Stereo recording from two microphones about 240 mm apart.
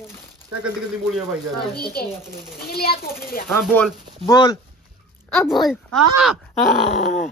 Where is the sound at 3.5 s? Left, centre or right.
Centre.